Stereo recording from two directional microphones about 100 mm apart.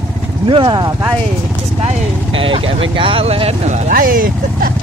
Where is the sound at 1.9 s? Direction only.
60° right (ahead or behind); by 3.5 s 80° right.